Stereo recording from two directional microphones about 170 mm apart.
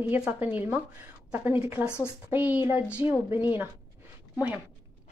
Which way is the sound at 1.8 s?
15° left (ahead or behind).